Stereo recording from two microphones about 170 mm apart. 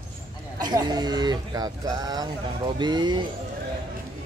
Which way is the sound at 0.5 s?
25° right (ahead or behind).